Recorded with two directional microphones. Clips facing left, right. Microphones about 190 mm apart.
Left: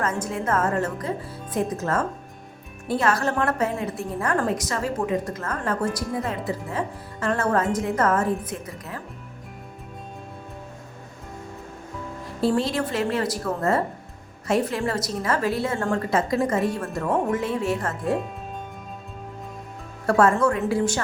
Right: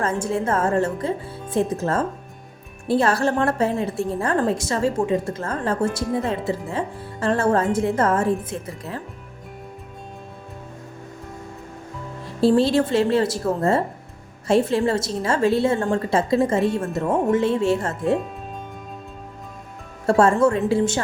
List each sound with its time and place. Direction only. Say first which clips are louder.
0.0 s a woman's voice: right 4 dB; 30° right (ahead or behind)
12.4 s a woman's voice: right 6 dB; 30° right (ahead or behind)
20.1 s a woman's voice: right 3 dB; 25° right (ahead or behind)